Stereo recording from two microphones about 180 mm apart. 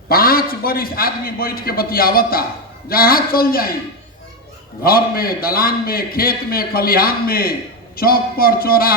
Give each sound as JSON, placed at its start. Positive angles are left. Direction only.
{"t": 0.1, "sound": "a man's voice", "side_deg": 55}
{"t": 4.8, "sound": "a man's voice", "side_deg": 55}